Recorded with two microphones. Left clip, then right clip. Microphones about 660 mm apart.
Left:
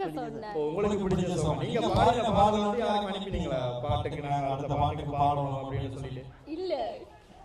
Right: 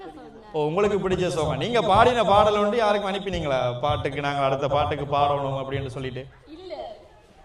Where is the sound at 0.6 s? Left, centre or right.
Right.